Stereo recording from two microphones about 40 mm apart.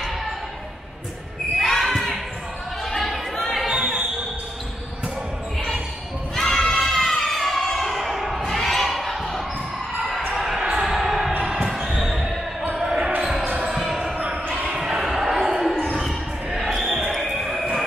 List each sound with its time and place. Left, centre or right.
1.6 s basketball bounce: centre
2.8 s chatter: centre
6.3 s crowd: centre
8.5 s basketball bounce: centre
10.7 s a sound: centre
11.7 s heart sounds: centre
12.7 s basketball bounce: centre
15.2 s basketball bounce: centre
16.7 s basketball bounce: centre
17.1 s a sound: centre